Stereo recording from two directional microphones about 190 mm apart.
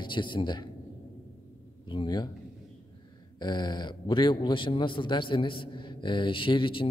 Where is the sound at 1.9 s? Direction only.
25° left (ahead or behind).